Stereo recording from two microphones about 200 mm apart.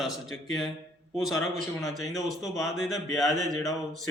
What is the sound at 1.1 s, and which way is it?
A man's voice, centre (ahead or behind).